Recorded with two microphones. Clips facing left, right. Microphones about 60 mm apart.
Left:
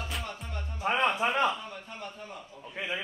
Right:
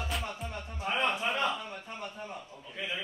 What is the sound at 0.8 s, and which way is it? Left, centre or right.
Music, left.